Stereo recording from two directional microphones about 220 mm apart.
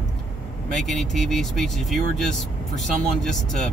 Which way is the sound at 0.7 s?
Centre (ahead or behind).